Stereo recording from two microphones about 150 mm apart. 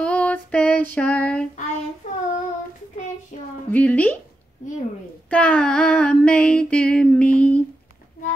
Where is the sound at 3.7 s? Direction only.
10° left (ahead or behind).